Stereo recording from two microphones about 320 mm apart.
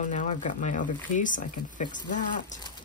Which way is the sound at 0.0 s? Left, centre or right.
Left.